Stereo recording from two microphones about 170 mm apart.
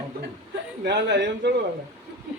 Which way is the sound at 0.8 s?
80° right.